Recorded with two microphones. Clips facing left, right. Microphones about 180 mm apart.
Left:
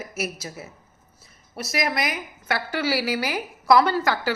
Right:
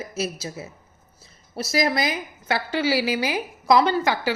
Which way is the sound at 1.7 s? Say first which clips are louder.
Right 3 dB; 30° right (ahead or behind).